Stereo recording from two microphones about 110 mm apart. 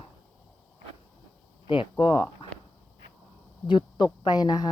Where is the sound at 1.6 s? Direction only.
50° left (ahead or behind).